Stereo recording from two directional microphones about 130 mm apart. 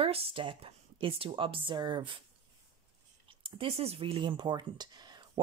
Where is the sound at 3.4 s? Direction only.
45° right (ahead or behind).